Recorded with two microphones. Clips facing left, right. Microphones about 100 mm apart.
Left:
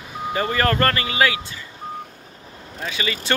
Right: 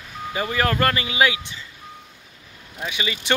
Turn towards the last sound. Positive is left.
turn(degrees=-15)  # may be behind; listen again after turning